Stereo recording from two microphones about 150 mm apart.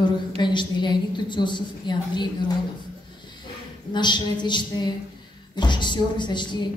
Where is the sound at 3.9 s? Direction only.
30° left (ahead or behind).